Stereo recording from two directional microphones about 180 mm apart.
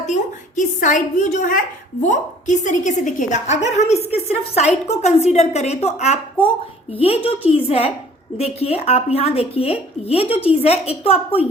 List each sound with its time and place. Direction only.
0.1 s a woman's voice: 45° left (ahead or behind)